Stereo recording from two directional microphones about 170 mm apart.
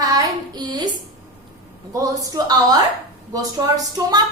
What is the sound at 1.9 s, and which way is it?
A woman's voice, 20° right (ahead or behind).